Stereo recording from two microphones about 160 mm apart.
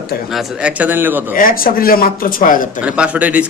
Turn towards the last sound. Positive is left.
turn(degrees=-10)  # may be behind; listen again after turning